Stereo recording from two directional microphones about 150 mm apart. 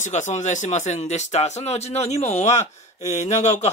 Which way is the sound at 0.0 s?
50° left (ahead or behind).